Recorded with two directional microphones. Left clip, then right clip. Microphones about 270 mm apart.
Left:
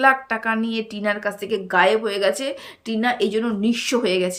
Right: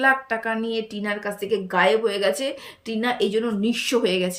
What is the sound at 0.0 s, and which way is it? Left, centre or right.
A woman's voice, centre.